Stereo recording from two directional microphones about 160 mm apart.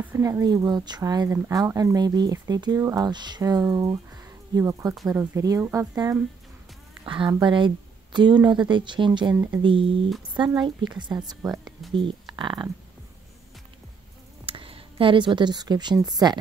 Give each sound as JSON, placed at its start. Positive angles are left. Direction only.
{"t": 0.0, "sound": "speech", "side_deg": -15}
{"t": 4.2, "sound": "a sound", "side_deg": -20}
{"t": 5.1, "sound": "speech", "side_deg": -15}
{"t": 11.5, "sound": "speech", "side_deg": 0}
{"t": 12.4, "sound": "speech", "side_deg": -30}
{"t": 14.4, "sound": "a woman's voice", "side_deg": -35}